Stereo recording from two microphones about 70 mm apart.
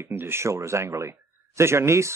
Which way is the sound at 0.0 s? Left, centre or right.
Right.